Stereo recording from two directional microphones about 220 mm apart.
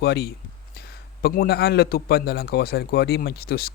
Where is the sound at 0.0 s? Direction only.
45° left (ahead or behind).